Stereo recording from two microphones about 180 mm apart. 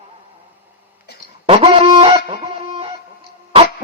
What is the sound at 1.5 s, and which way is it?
Chicken, 30° right (ahead or behind).